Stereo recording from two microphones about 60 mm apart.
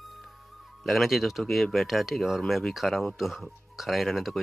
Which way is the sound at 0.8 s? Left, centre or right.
Centre.